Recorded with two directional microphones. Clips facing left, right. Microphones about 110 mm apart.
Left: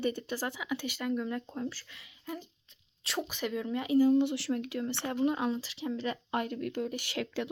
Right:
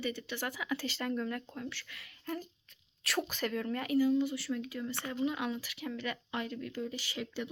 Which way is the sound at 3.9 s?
45° left (ahead or behind).